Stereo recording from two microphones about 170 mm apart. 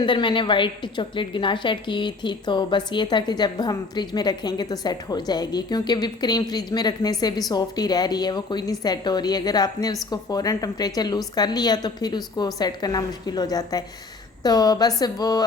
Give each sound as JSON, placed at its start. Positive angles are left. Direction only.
{"t": 0.0, "sound": "a woman's voice", "side_deg": 30}